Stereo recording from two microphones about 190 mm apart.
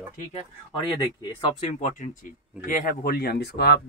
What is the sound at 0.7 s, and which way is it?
Speech, 25° left (ahead or behind).